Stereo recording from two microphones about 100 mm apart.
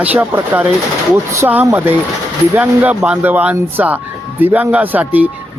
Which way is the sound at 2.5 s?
15° right (ahead or behind).